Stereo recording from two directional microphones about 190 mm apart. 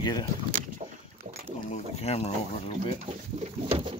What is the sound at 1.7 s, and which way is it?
Speech, 35° left (ahead or behind).